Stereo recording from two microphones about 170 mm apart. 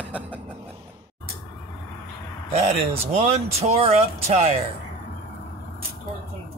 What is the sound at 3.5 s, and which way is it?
Speech, 35° right (ahead or behind).